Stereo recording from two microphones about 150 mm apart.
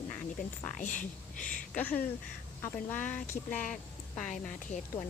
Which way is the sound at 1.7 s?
10° left (ahead or behind).